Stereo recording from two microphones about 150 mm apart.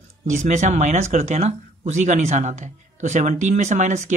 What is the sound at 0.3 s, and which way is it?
Speech, 50° right (ahead or behind).